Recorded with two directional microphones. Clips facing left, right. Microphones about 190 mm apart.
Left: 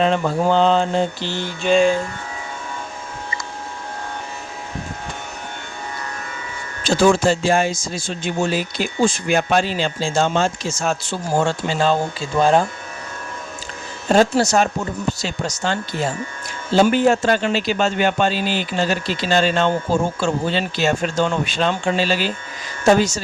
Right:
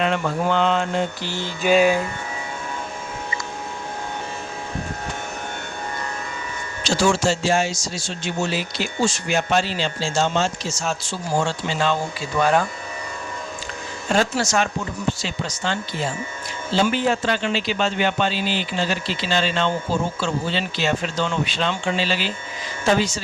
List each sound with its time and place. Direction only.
0.0 s mantra: 35° left (ahead or behind)
1.6 s music: 5° right (ahead or behind)
6.8 s speech: 55° left (ahead or behind)
11.7 s mantra: 40° left (ahead or behind)
12.4 s speech: 30° left (ahead or behind)
14.1 s mantra: 40° left (ahead or behind)
15.6 s speech: 45° left (ahead or behind)